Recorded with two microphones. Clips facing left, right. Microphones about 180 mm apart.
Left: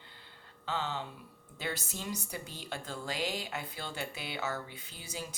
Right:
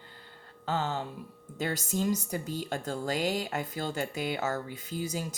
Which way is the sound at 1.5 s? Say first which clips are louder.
Right 8 dB; 45° right (ahead or behind).